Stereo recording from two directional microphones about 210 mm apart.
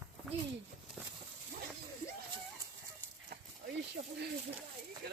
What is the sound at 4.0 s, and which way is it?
Snake, 40° right (ahead or behind).